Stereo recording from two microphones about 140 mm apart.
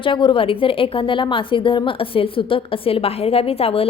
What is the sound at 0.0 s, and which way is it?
A woman's voice, 35° left (ahead or behind).